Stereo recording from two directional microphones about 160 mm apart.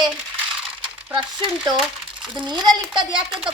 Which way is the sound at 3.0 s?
30° right (ahead or behind).